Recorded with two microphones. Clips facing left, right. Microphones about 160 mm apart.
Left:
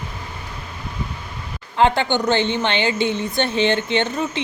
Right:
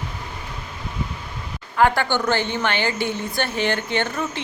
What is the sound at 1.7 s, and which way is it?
A woman's voice, 20° left (ahead or behind).